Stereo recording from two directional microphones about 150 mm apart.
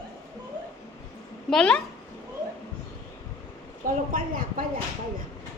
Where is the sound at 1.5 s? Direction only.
5° left (ahead or behind).